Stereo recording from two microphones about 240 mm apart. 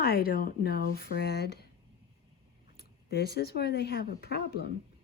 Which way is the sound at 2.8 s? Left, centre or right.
Left.